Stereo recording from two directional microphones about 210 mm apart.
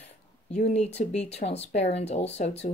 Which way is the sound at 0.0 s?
30° left (ahead or behind).